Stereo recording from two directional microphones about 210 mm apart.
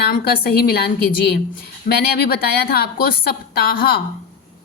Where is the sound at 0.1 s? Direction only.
45° left (ahead or behind).